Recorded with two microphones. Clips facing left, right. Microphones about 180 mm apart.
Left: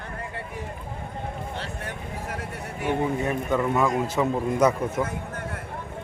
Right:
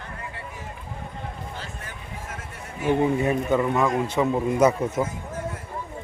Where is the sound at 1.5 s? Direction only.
65° left (ahead or behind).